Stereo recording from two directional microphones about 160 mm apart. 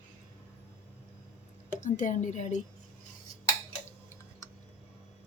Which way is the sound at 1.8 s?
50° left (ahead or behind).